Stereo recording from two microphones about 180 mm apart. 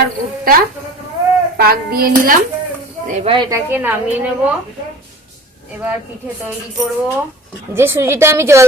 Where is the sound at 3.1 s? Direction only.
35° right (ahead or behind).